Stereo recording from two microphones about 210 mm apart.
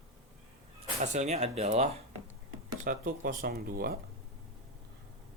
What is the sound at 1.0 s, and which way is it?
Speech, 30° right (ahead or behind).